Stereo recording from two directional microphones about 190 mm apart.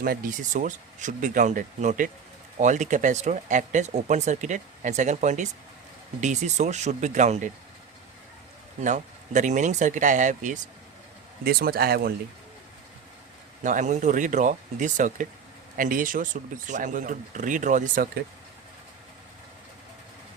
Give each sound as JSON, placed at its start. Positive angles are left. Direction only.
{"t": 0.0, "sound": "speech", "side_deg": -45}
{"t": 8.8, "sound": "speech", "side_deg": -40}
{"t": 11.4, "sound": "speech", "side_deg": -55}
{"t": 13.6, "sound": "speech", "side_deg": -40}